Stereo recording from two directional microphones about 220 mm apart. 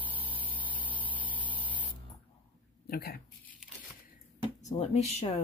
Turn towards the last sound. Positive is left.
turn(degrees=30)  # may be behind; listen again after turning